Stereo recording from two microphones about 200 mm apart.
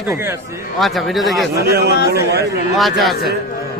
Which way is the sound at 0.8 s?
Centre (ahead or behind).